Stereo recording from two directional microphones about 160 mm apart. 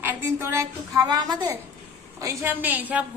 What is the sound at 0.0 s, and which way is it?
A woman's voice, 15° right (ahead or behind).